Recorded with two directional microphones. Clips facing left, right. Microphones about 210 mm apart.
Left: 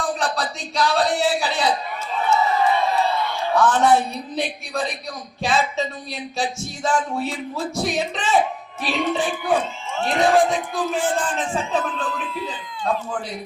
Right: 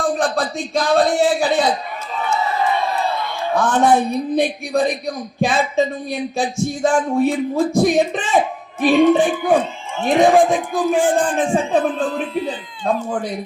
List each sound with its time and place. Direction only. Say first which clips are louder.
0.0 s a man's voice: right 5 dB; 50° right (ahead or behind)
3.6 s a man's voice: right 2 dB; 50° right (ahead or behind)
10.0 s speech: right 6 dB; 15° right (ahead or behind)
10.2 s speech: right 2 dB; 55° right (ahead or behind)
11.8 s speech: right 7 dB; 40° right (ahead or behind)